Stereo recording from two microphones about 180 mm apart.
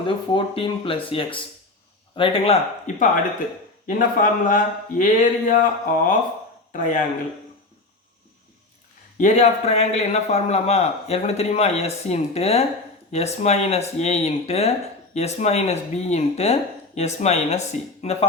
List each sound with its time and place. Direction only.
0.0 s speech: 30° left (ahead or behind); by 7.0 s 45° left (ahead or behind)
9.1 s speech: 40° left (ahead or behind)